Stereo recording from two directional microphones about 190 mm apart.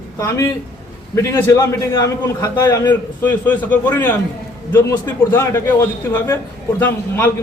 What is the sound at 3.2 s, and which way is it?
A man's voice, 10° left (ahead or behind).